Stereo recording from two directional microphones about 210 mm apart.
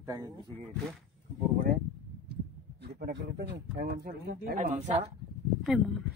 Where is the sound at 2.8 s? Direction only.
55° right (ahead or behind); by 5.1 s 35° right (ahead or behind).